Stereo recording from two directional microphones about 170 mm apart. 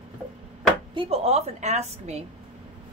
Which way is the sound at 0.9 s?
35° right (ahead or behind).